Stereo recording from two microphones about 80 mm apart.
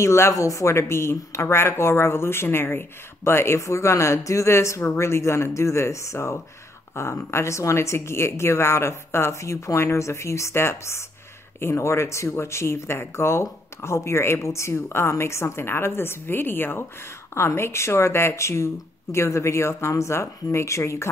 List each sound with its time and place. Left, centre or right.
0.0 s speech: left